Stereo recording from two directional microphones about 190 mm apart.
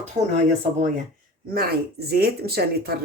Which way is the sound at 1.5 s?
55° right (ahead or behind).